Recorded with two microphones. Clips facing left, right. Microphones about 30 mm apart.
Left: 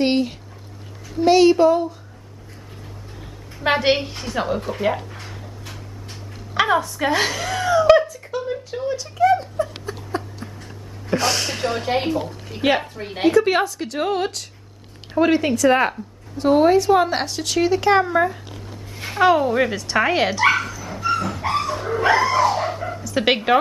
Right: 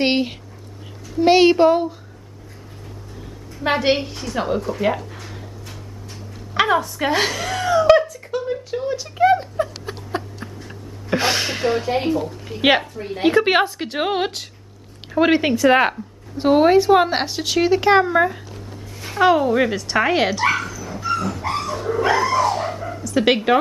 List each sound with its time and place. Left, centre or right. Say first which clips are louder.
0.0 s a woman's voice: even; right
3.5 s a woman's voice: even; centre
6.5 s speech: right 1 dB; centre
9.6 s a sound: right 1 dB; right
11.1 s speech: right 1 dB; right
12.8 s a woman's voice: right 2 dB; left
13.2 s a woman's voice: right 1 dB; right; by 18.4 s centre
19.1 s speech: right 1 dB; centre
20.4 s dog: left 2 dB; centre
22.9 s a woman's voice: right 3 dB; centre